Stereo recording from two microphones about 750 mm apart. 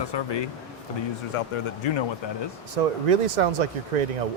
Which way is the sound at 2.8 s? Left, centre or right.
Right.